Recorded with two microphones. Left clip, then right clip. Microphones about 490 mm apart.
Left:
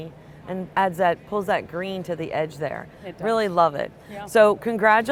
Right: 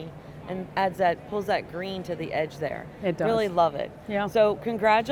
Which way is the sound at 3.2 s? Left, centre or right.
Left.